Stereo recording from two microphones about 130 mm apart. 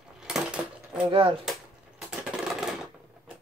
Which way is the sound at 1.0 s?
45° right (ahead or behind).